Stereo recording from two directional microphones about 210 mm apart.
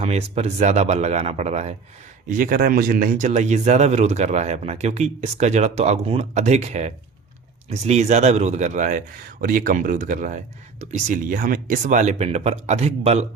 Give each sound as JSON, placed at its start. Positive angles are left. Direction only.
{"t": 0.0, "sound": "speech", "side_deg": -30}